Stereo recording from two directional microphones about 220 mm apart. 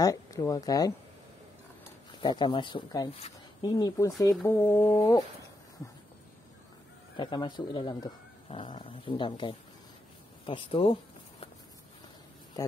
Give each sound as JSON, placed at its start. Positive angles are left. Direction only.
{"t": 0.0, "sound": "speech", "side_deg": 15}
{"t": 2.2, "sound": "speech", "side_deg": 20}
{"t": 7.2, "sound": "speech", "side_deg": 20}